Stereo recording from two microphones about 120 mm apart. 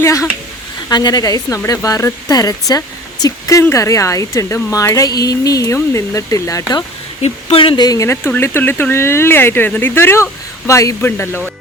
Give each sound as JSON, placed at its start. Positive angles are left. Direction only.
{"t": 0.0, "sound": "speech", "side_deg": 25}
{"t": 7.2, "sound": "speech", "side_deg": 55}
{"t": 7.8, "sound": "speech", "side_deg": 30}